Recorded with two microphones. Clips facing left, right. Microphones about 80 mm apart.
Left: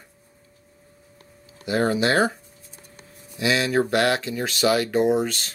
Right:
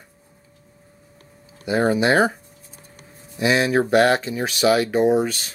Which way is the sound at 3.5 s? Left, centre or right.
Right.